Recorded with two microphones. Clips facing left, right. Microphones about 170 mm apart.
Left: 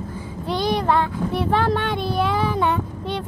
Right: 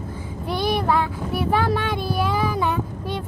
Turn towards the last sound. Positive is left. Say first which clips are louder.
# left 1 dB
turn(degrees=-5)  # may be behind; listen again after turning